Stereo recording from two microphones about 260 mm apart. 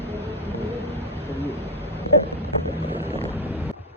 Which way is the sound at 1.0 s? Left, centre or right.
Centre.